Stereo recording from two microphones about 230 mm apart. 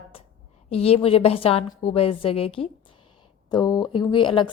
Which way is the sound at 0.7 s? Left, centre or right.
Left.